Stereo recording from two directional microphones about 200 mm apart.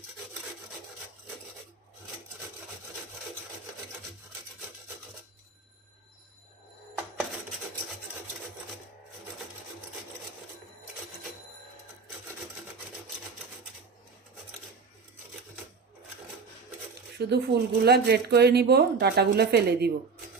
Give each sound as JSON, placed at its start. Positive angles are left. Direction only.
{"t": 17.2, "sound": "speech", "side_deg": -55}